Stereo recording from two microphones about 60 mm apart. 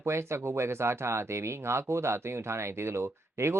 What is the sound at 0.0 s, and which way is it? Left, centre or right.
Speech, right.